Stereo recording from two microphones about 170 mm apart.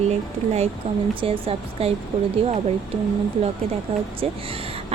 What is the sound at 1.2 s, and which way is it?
Speech, 35° right (ahead or behind).